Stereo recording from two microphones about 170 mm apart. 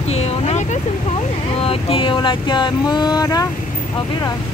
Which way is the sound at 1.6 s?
35° left (ahead or behind).